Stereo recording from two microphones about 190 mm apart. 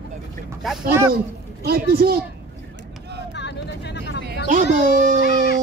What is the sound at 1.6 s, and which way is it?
Speech, 55° right (ahead or behind).